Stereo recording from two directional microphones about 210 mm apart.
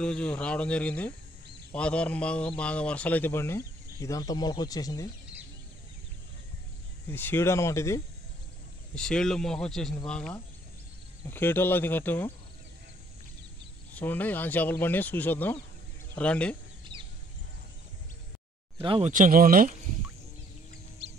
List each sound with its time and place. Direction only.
0.0 s a man's voice: 5° left (ahead or behind)
7.1 s a man's voice: 10° left (ahead or behind)
8.9 s a man's voice: 5° left (ahead or behind)
13.9 s a man's voice: 10° left (ahead or behind)
16.9 s a sound: 20° right (ahead or behind)
18.8 s speech: 25° right (ahead or behind)
19.1 s speech: 40° right (ahead or behind)